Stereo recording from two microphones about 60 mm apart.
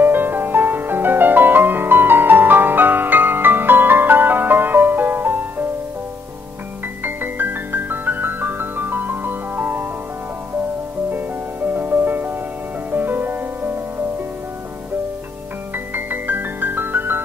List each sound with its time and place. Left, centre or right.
0.0 s music: right
7.0 s music: right
11.1 s music: right
15.7 s music: right